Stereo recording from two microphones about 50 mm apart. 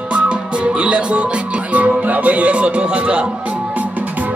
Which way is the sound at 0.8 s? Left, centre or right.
Right.